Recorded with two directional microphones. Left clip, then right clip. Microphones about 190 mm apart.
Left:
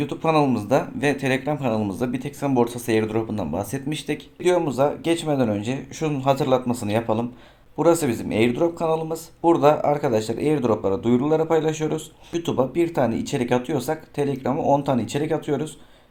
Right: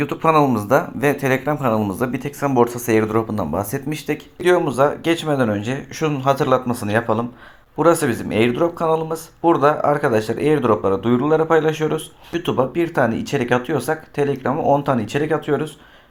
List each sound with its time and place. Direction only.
0.1 s speech: 15° right (ahead or behind)
3.8 s speech: centre (ahead or behind)